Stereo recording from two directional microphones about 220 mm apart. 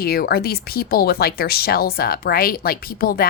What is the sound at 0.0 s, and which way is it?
Speech, 45° left (ahead or behind).